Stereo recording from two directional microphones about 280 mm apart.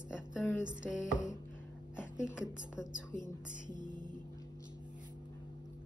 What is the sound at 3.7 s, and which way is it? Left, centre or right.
Music, centre.